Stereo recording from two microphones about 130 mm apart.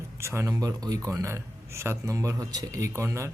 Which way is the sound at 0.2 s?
20° right (ahead or behind).